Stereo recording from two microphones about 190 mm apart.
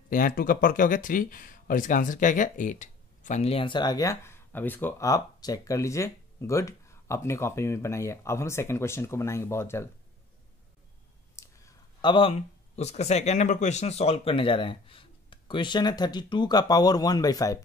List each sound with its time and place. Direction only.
0.1 s speech: 45° left (ahead or behind); by 9.8 s 15° left (ahead or behind)
11.3 s speech: 20° left (ahead or behind)